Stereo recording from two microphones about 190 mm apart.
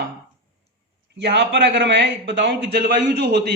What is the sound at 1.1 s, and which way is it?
A man's voice, 65° right (ahead or behind).